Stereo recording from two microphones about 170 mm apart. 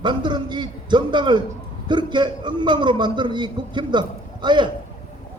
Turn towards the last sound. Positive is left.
turn(degrees=-25)  # may be behind; listen again after turning